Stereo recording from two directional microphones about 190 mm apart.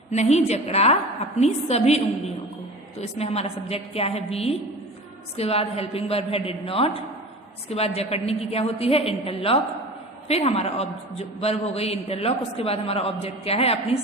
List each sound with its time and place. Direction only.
0.1 s a man's voice: 35° left (ahead or behind)